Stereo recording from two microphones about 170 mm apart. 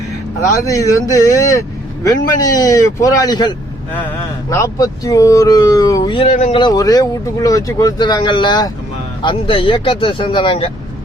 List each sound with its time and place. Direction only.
0.4 s speech: 20° left (ahead or behind); by 6.6 s 40° left (ahead or behind)
6.6 s speech: 25° left (ahead or behind)